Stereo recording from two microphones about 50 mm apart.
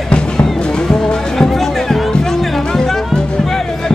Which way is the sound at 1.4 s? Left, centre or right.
Centre.